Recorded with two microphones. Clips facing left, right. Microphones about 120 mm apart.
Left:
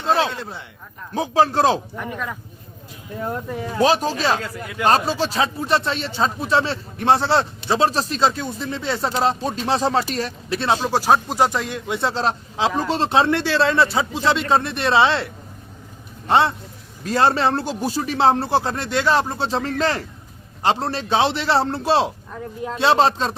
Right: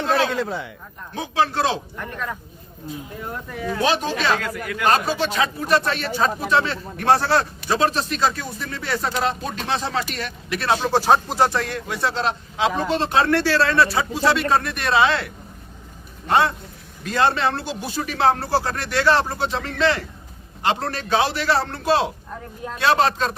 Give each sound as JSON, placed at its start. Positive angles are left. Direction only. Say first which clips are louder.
{"t": 1.1, "sound": "speech", "louder": "left 4 dB", "side_deg": 35}
{"t": 2.0, "sound": "speech", "louder": "left 1 dB", "side_deg": 10}
{"t": 3.5, "sound": "speech", "louder": "left 3 dB", "side_deg": 30}
{"t": 10.9, "sound": "a man's voice", "louder": "right 1 dB", "side_deg": 10}
{"t": 19.4, "sound": "speech", "louder": "left 1 dB", "side_deg": 35}